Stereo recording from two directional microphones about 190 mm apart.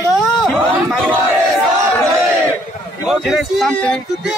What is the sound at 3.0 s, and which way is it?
Speech, centre (ahead or behind).